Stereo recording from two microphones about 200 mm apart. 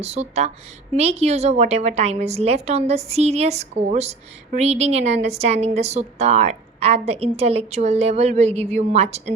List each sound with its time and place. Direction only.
0.0 s a woman's voice: 30° right (ahead or behind)